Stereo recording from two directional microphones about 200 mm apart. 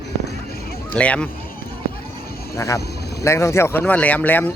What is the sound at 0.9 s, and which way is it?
Speech, 5° left (ahead or behind).